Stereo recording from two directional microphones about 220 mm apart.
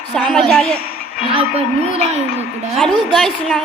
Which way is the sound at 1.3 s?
25° right (ahead or behind).